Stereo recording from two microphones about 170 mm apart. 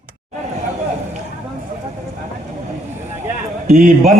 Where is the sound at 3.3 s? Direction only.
45° right (ahead or behind).